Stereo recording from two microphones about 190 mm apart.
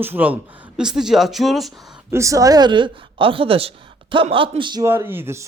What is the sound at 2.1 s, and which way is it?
A woman's voice, 15° right (ahead or behind).